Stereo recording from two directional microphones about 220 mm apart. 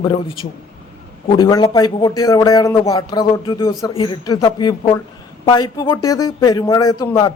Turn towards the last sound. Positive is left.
turn(degrees=15)  # may be behind; listen again after turning